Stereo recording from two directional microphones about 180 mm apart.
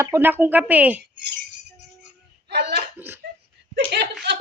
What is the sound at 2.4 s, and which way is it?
Hiccup, 65° right (ahead or behind).